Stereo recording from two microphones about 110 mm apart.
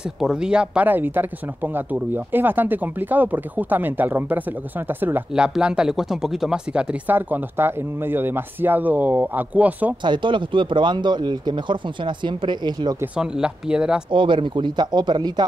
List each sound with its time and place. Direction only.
0.2 s speech: 5° right (ahead or behind)
5.3 s speech: 10° right (ahead or behind)
10.0 s speech: 45° right (ahead or behind)
13.0 s speech: 10° right (ahead or behind)
14.1 s speech: 50° right (ahead or behind)